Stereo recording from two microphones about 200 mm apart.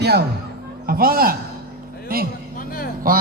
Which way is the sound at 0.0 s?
55° right (ahead or behind).